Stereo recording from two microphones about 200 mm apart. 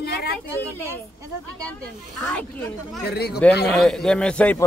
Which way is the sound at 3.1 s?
55° left (ahead or behind).